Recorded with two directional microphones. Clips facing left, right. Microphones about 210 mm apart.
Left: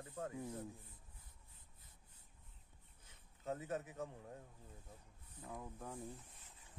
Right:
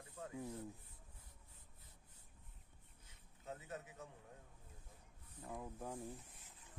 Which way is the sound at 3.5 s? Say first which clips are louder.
Left 7 dB; 90° left.